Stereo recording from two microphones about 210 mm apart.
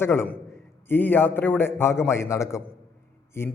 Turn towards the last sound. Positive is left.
turn(degrees=10)  # may be behind; listen again after turning